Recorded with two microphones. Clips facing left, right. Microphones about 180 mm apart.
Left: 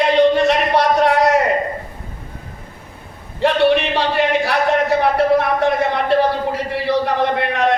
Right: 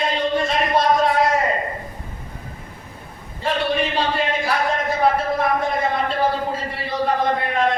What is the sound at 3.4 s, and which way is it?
Speech, 75° left (ahead or behind).